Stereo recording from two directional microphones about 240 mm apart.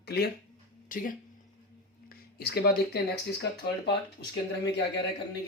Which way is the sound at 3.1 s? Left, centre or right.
Left.